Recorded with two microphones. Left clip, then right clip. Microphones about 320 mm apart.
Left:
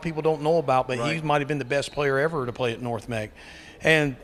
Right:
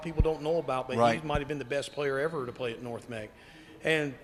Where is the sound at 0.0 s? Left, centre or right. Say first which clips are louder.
Left 7 dB; left.